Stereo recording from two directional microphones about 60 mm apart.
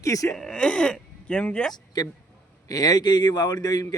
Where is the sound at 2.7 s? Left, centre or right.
Left.